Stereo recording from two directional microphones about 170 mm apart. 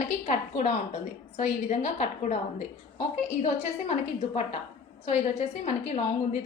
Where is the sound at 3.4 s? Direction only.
40° left (ahead or behind).